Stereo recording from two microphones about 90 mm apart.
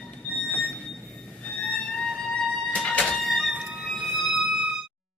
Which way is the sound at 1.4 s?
10° left (ahead or behind).